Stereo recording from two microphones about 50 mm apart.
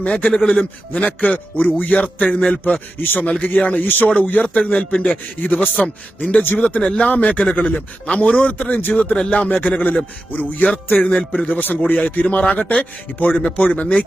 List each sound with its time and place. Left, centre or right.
0.0 s a man's voice: left
3.0 s speech: left
3.2 s a man's voice: left
6.8 s a man's voice: left
9.1 s a man's voice: left
9.5 s a man's voice: left